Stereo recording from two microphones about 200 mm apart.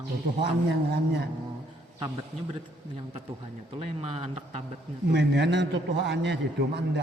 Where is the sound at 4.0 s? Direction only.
30° right (ahead or behind).